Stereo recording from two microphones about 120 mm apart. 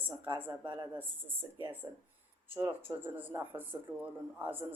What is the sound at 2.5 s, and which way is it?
Speech, 15° right (ahead or behind).